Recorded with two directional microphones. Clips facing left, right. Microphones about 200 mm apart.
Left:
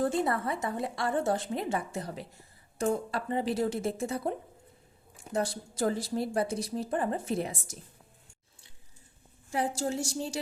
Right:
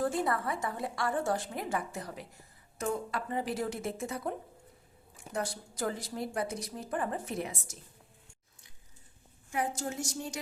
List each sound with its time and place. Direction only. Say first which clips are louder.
0.0 s a woman's voice: left 2 dB; 25° left (ahead or behind)
9.5 s a woman's voice: left 4 dB; 30° left (ahead or behind)